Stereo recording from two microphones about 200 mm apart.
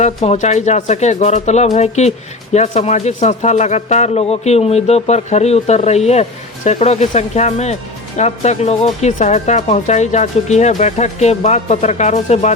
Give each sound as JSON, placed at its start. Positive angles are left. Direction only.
{"t": 0.3, "sound": "speech", "side_deg": 35}